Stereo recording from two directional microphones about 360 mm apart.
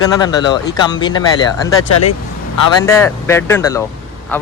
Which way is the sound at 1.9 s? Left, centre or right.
Left.